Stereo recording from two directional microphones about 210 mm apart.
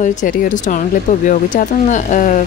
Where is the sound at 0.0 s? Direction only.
40° left (ahead or behind).